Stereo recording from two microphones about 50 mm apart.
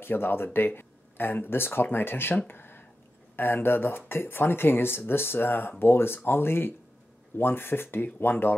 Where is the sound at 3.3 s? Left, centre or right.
Left.